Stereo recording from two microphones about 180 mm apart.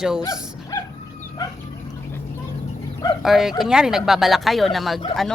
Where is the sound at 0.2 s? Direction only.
20° left (ahead or behind).